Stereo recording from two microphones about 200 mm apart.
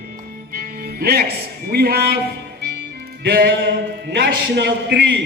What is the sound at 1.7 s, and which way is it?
Speech, 50° right (ahead or behind).